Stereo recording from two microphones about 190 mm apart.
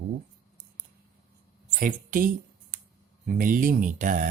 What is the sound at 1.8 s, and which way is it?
Speech, 45° right (ahead or behind).